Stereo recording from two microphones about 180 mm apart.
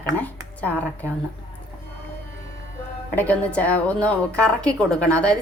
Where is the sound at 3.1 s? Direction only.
10° left (ahead or behind).